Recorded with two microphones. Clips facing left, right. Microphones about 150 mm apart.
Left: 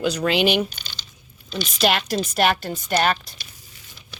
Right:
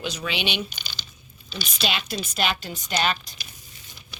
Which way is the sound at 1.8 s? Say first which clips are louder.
Left 8 dB; 65° left (ahead or behind).